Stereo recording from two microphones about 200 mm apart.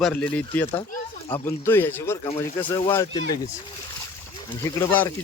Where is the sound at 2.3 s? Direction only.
25° left (ahead or behind).